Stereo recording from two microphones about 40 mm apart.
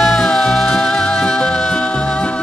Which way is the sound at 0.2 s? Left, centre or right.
Centre.